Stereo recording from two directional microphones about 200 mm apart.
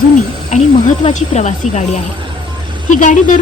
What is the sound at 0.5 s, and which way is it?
Speech, 35° left (ahead or behind).